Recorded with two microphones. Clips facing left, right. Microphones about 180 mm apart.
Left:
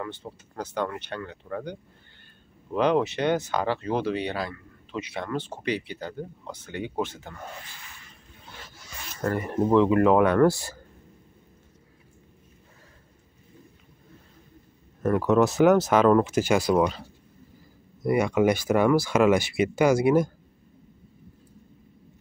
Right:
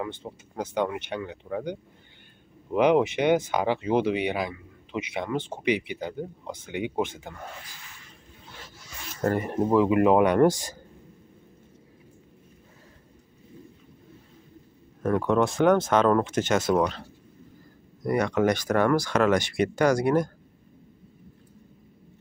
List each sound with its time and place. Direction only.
0.0 s speech: 15° right (ahead or behind)
9.7 s speech: 10° right (ahead or behind)
15.0 s speech: 5° left (ahead or behind)
18.0 s speech: 10° left (ahead or behind)